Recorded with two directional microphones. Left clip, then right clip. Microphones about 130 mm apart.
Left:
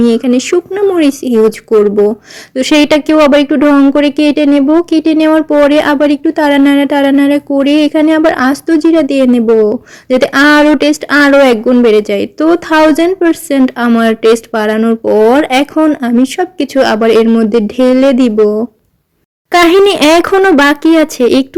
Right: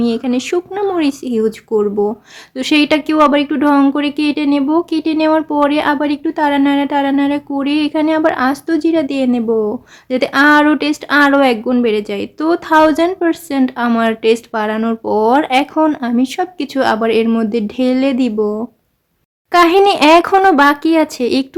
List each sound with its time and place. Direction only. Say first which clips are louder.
0.0 s a woman's voice: left 7 dB; 20° left (ahead or behind)
2.6 s a woman's voice: left 5 dB; 20° left (ahead or behind)